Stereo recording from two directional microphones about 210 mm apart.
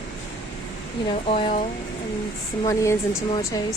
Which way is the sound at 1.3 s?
30° left (ahead or behind).